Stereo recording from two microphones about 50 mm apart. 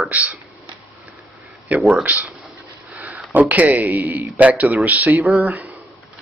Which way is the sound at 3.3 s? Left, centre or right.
Right.